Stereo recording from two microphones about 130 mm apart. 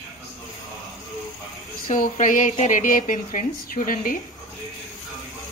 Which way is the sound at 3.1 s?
80° left.